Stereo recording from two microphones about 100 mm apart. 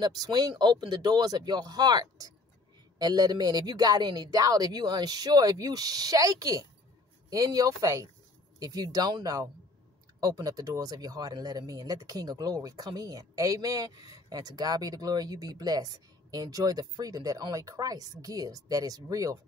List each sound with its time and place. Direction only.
0.0 s speech: 40° right (ahead or behind)